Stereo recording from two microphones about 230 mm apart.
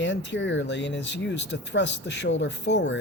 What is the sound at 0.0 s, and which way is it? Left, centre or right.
Speech, left.